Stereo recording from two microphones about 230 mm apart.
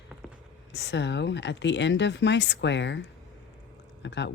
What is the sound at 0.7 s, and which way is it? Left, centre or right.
Speech, left.